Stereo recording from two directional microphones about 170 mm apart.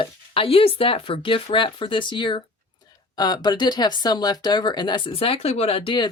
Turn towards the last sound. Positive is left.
turn(degrees=30)  # may be behind; listen again after turning